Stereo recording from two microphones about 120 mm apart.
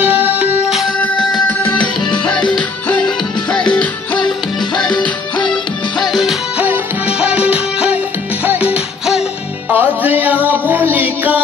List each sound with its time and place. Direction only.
0.0 s music: 15° right (ahead or behind)
1.6 s music: 15° left (ahead or behind)
3.5 s music: 10° left (ahead or behind)
4.7 s music: 35° left (ahead or behind)
5.5 s music: centre (ahead or behind)
6.6 s music: 10° right (ahead or behind)